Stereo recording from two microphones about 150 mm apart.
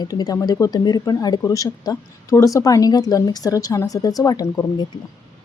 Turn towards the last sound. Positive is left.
turn(degrees=25)  # may be behind; listen again after turning